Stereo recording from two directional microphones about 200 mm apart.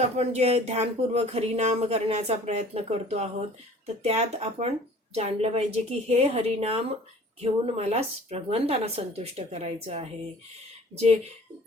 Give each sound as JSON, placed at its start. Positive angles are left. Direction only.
{"t": 0.2, "sound": "speech", "side_deg": -30}